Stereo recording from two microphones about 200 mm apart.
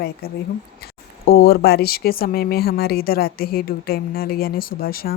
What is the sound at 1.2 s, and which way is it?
Speech, 50° left (ahead or behind).